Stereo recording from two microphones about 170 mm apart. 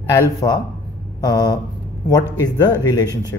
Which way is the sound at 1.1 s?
20° left (ahead or behind).